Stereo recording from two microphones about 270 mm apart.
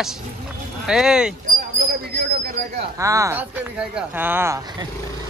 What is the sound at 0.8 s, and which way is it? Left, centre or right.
Speech, centre.